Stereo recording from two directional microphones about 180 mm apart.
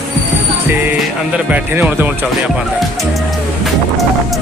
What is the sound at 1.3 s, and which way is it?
Speech, 10° right (ahead or behind).